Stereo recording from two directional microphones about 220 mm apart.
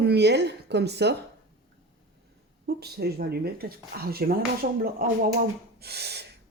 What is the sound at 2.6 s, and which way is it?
Speech, 45° right (ahead or behind).